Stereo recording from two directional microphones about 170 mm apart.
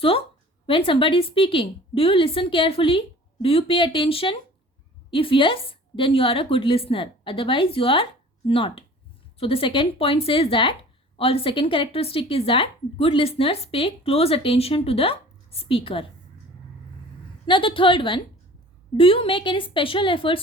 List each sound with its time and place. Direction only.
0.7 s speech: 30° left (ahead or behind)
17.4 s speech: 30° left (ahead or behind)